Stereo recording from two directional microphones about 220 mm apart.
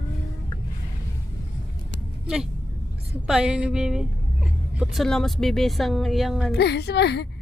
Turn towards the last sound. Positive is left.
turn(degrees=50)  # may be behind; listen again after turning